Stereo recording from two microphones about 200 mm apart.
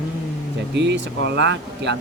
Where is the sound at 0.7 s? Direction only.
60° right (ahead or behind).